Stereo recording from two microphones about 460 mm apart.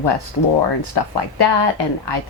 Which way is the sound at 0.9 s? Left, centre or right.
Left.